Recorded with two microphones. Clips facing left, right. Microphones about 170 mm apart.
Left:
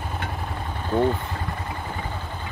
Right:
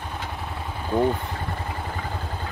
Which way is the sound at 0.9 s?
10° right (ahead or behind).